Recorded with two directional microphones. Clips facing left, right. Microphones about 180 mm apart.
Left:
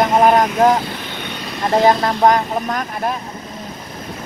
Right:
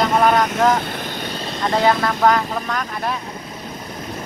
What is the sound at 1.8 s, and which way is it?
Speech, 35° left (ahead or behind).